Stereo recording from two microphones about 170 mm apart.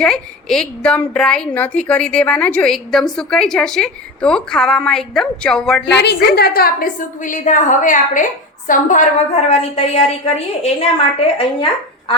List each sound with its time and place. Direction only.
0.0 s a woman's voice: 5° left (ahead or behind)
5.8 s a woman's voice: 85° left
6.3 s a woman's voice: 65° left (ahead or behind); by 12.1 s 35° left (ahead or behind)